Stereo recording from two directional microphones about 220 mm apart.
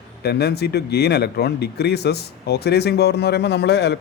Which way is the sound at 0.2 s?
45° left (ahead or behind).